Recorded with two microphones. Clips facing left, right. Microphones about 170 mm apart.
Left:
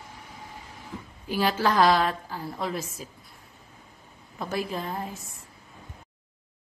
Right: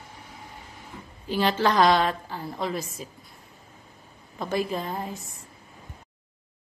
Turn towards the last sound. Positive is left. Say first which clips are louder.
# right 2 dB
turn(degrees=0)  # may be behind; listen again after turning